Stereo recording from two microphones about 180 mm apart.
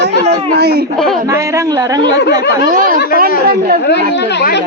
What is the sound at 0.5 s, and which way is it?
Speech, 60° right (ahead or behind).